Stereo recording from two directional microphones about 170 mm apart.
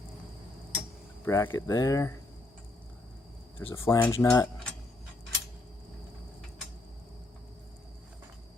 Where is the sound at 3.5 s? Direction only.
15° left (ahead or behind).